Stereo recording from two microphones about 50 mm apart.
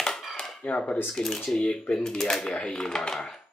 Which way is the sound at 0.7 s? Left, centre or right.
Left.